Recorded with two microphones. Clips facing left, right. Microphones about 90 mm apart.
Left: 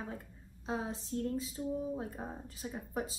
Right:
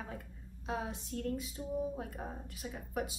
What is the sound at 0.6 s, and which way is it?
A woman's voice, 30° left (ahead or behind).